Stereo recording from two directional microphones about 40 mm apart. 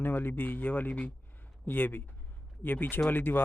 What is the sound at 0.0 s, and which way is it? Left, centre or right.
Speech, left.